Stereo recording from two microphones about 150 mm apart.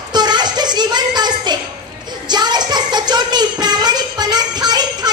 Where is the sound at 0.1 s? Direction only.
30° right (ahead or behind).